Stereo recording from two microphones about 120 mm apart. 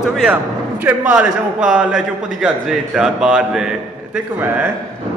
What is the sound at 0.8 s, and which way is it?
A man's voice, 15° right (ahead or behind).